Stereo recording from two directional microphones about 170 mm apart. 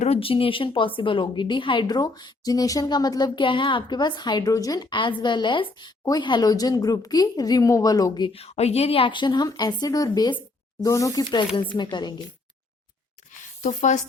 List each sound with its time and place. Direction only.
0.0 s a woman's voice: 35° left (ahead or behind)
13.6 s speech: 45° left (ahead or behind)